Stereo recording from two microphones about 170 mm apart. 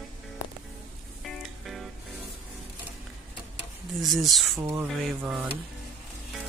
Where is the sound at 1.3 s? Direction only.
Centre (ahead or behind).